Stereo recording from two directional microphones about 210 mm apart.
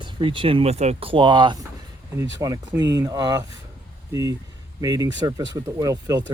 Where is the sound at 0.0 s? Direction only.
25° right (ahead or behind).